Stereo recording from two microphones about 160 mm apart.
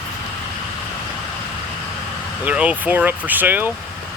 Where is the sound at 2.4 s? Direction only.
10° right (ahead or behind).